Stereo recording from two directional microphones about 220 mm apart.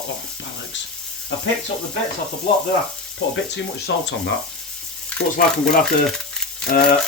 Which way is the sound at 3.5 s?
50° left (ahead or behind).